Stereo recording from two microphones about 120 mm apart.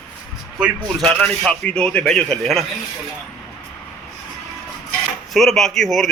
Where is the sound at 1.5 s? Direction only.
10° left (ahead or behind).